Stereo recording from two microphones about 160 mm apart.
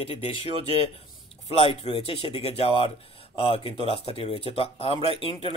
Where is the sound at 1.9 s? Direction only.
35° left (ahead or behind).